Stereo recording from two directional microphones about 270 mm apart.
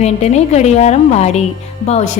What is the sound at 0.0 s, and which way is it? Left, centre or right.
A woman's voice, left.